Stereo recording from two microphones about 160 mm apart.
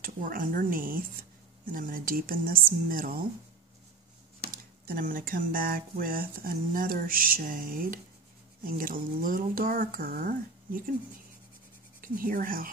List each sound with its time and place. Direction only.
0.0 s speech: 60° right (ahead or behind)
4.8 s speech: 60° right (ahead or behind)
12.0 s speech: 60° right (ahead or behind)